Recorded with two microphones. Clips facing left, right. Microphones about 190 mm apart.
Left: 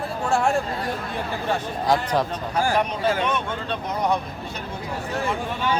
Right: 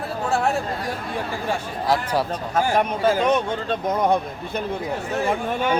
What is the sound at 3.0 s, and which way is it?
A man's voice, 40° right (ahead or behind).